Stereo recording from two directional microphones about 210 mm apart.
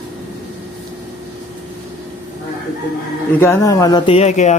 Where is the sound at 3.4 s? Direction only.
15° left (ahead or behind); by 4.5 s 35° left (ahead or behind).